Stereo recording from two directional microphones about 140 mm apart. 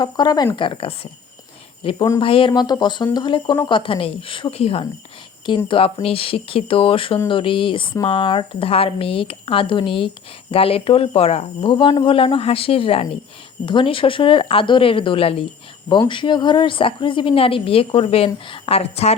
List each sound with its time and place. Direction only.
0.0 s a woman's voice: 30° left (ahead or behind); by 19.1 s 45° left (ahead or behind)